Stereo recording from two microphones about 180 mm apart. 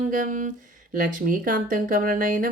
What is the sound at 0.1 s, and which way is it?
Speech, 45° right (ahead or behind).